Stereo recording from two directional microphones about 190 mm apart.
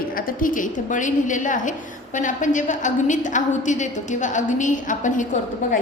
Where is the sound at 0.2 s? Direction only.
45° left (ahead or behind).